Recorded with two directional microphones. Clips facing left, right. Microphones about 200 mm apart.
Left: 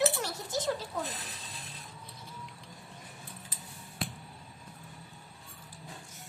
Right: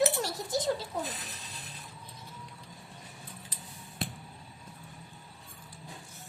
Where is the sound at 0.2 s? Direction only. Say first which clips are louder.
Right 3 dB; 35° right (ahead or behind).